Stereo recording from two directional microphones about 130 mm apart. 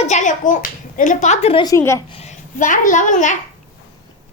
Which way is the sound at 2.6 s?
75° left (ahead or behind).